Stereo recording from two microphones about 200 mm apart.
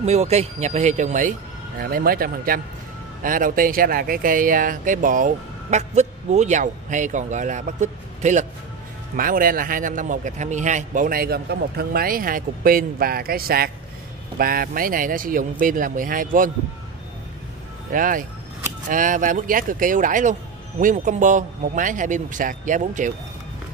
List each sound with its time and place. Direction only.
0.0 s a man's voice: 30° right (ahead or behind)
17.9 s a man's voice: 45° right (ahead or behind)